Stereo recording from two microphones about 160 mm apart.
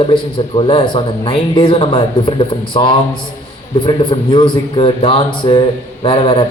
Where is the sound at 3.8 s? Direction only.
30° left (ahead or behind).